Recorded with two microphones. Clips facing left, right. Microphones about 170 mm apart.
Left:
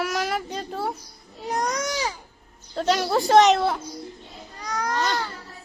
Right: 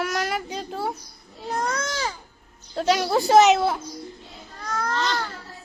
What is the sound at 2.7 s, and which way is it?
A child's voice, 5° right (ahead or behind).